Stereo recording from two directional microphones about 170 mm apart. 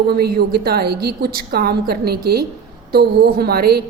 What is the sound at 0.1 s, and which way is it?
A woman's voice, 65° right (ahead or behind).